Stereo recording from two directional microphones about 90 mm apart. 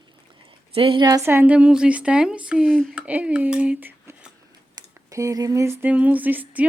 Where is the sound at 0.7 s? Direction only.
85° right.